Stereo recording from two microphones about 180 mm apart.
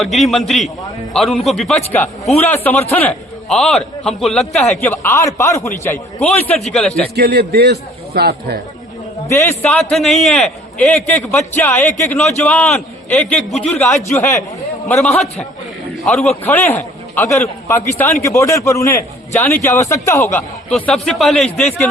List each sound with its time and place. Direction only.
0.0 s a man's voice: centre (ahead or behind)
4.8 s a man's voice: 15° left (ahead or behind)
6.7 s a man's voice: 5° left (ahead or behind)
7.2 s a man's voice: 65° right (ahead or behind)
9.2 s a man's voice: 15° left (ahead or behind)
9.9 s a man's voice: centre (ahead or behind)
11.6 s a man's voice: 15° left (ahead or behind)
14.1 s a man's voice: 15° left (ahead or behind)
20.7 s a man's voice: 5° left (ahead or behind)